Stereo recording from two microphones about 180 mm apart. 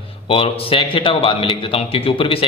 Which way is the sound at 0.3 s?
30° left (ahead or behind).